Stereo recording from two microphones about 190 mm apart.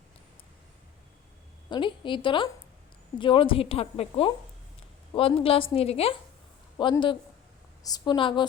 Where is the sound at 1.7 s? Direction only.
25° left (ahead or behind).